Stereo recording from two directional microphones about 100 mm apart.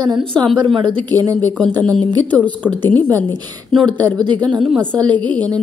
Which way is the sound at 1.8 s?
10° left (ahead or behind).